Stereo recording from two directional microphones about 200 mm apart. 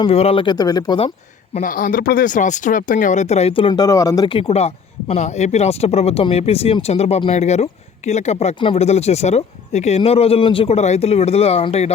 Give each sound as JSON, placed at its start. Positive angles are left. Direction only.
{"t": 0.0, "sound": "speech", "side_deg": 30}
{"t": 1.5, "sound": "speech", "side_deg": 45}